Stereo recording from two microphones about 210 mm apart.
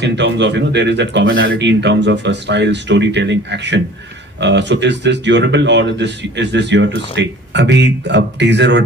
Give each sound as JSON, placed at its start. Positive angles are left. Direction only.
{"t": 0.0, "sound": "speech", "side_deg": -55}